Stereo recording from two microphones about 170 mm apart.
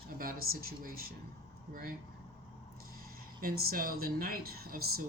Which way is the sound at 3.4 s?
60° right (ahead or behind).